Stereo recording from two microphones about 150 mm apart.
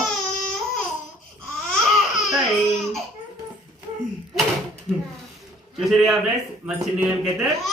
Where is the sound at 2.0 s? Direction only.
Centre (ahead or behind).